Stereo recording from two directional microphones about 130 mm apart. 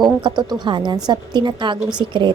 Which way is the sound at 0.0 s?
35° right (ahead or behind).